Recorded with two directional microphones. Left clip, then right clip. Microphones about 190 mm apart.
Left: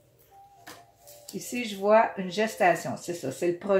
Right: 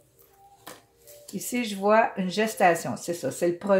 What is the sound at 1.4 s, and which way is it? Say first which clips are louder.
Speech: right 3 dB; 45° right (ahead or behind).